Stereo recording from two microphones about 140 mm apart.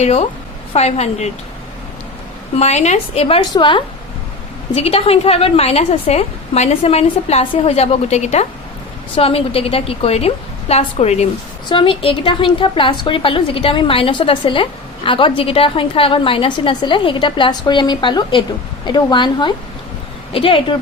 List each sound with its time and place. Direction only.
0.0 s a woman's voice: 50° left (ahead or behind)
2.6 s a woman's voice: 50° left (ahead or behind)
11.7 s a woman's voice: 40° left (ahead or behind)